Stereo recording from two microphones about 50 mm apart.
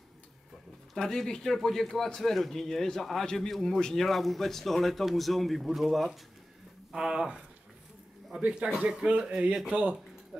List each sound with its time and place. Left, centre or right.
0.9 s speech: centre
8.7 s speech: centre